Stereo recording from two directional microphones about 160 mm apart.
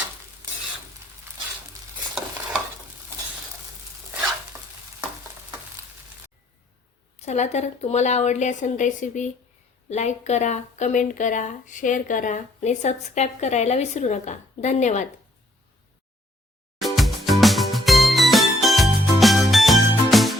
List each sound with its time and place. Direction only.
4.5 s stir: 20° right (ahead or behind)
7.2 s speech: 45° left (ahead or behind)
16.8 s music: centre (ahead or behind)